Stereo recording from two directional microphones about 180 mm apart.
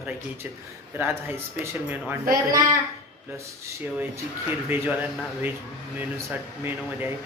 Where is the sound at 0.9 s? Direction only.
10° right (ahead or behind).